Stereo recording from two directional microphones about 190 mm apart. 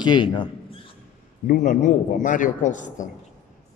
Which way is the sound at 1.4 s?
40° left (ahead or behind).